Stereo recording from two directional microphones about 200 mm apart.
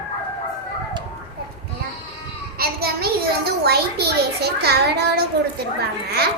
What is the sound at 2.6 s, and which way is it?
Child singing, 50° right (ahead or behind).